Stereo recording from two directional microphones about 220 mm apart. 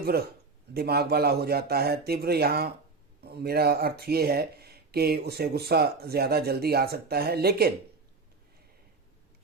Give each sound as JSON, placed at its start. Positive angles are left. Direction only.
{"t": 0.0, "sound": "speech", "side_deg": -45}